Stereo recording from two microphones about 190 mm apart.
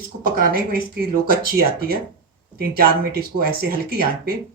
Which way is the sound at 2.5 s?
50° right (ahead or behind).